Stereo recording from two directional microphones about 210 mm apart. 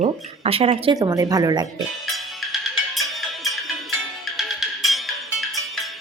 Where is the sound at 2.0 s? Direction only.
Centre (ahead or behind).